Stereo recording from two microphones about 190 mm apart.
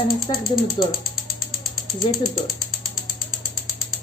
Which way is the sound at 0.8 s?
25° left (ahead or behind).